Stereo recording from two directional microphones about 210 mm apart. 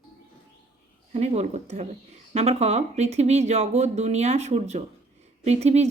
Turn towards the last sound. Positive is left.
turn(degrees=-30)  # may be behind; listen again after turning